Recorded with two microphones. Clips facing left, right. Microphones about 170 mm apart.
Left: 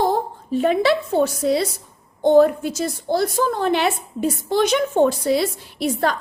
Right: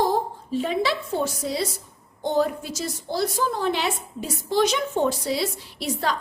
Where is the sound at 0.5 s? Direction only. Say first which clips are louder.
Left 7 dB; 60° left (ahead or behind).